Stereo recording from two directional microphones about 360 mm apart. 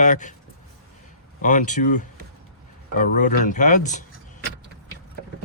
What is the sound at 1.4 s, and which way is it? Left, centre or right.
Speech, left.